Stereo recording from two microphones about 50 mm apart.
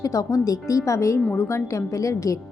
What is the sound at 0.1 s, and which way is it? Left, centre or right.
A woman's voice, left.